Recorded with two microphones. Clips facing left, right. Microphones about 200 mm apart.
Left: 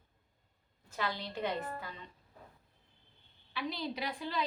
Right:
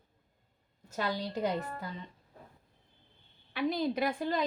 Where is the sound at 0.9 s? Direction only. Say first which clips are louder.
Right 4 dB; 40° right (ahead or behind).